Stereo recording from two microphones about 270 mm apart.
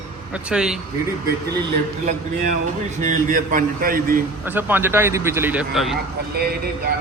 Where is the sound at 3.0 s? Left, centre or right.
Right.